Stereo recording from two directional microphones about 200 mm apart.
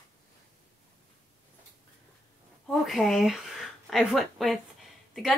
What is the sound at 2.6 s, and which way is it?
A woman's voice, centre (ahead or behind).